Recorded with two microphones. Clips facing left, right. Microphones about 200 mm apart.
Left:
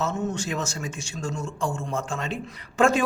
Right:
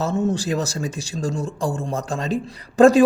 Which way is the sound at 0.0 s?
35° right (ahead or behind).